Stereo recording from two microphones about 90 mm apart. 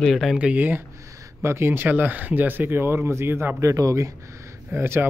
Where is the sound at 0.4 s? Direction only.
15° right (ahead or behind).